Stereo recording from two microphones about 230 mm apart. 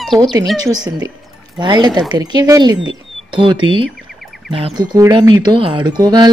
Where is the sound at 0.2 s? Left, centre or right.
Centre.